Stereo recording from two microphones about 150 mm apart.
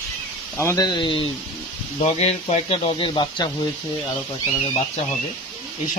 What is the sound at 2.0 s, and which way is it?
Speech, 45° left (ahead or behind).